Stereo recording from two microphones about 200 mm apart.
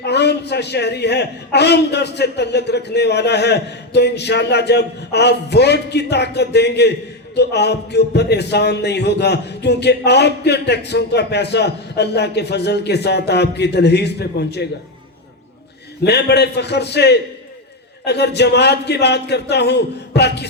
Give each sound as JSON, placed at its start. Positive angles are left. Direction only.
{"t": 0.0, "sound": "a man's voice", "side_deg": 55}
{"t": 16.0, "sound": "a man's voice", "side_deg": 55}